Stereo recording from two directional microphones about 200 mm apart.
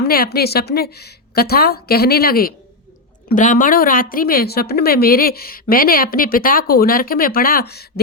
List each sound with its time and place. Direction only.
0.0 s a woman's voice: 50° left (ahead or behind)